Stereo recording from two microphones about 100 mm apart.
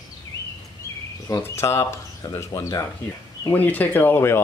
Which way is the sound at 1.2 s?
30° left (ahead or behind).